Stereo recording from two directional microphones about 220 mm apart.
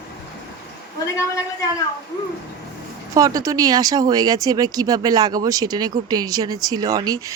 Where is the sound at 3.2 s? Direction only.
15° right (ahead or behind).